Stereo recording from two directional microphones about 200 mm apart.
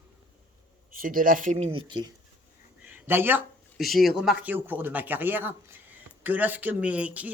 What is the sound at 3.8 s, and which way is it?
A man's voice, centre (ahead or behind).